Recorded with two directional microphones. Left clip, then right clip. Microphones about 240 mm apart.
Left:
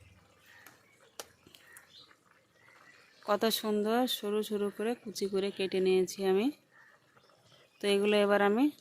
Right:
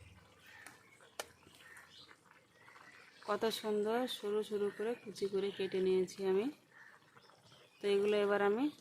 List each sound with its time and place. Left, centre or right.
3.2 s speech: left
7.8 s speech: left